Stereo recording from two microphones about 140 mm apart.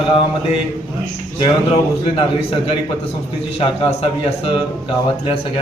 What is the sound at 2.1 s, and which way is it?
A man's voice, 40° left (ahead or behind).